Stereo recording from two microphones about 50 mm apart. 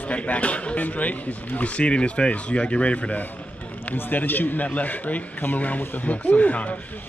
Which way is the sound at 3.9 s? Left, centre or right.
Left.